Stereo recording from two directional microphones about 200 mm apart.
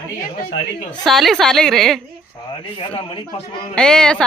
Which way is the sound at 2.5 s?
25° left (ahead or behind).